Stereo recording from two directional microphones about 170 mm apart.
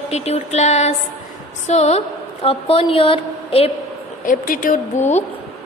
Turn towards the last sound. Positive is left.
turn(degrees=45)  # may be behind; listen again after turning